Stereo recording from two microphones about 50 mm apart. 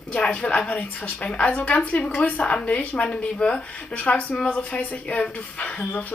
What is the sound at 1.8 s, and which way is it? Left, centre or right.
A woman's voice, left.